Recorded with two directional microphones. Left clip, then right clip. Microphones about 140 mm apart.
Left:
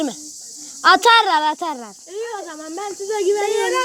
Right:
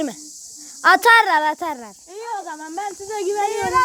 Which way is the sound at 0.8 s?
45° right (ahead or behind).